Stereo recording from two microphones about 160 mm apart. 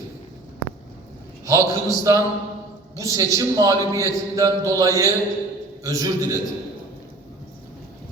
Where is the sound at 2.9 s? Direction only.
20° right (ahead or behind).